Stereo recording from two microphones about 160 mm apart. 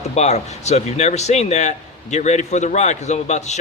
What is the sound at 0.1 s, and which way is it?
A man's voice, 45° left (ahead or behind).